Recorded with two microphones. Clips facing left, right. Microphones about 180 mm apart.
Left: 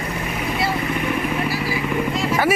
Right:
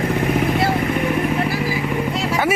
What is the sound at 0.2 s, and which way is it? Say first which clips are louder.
Vehicle: right 4 dB; 55° right (ahead or behind).